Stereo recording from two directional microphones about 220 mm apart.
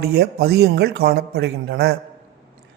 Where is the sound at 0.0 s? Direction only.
45° right (ahead or behind).